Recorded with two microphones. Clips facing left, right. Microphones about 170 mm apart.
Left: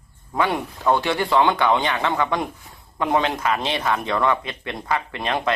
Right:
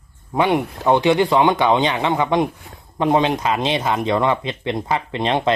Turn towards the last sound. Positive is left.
turn(degrees=-25)  # may be behind; listen again after turning